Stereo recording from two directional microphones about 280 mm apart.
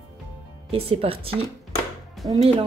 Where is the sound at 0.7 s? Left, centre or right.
Centre.